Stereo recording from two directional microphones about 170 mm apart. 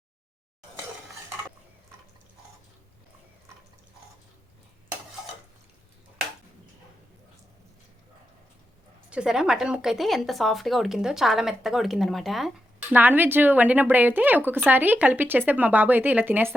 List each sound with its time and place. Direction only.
9.0 s speech: 5° right (ahead or behind)
12.9 s speech: 10° right (ahead or behind)